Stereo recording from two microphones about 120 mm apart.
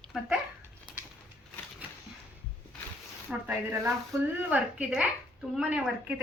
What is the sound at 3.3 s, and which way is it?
A woman's voice, 10° right (ahead or behind).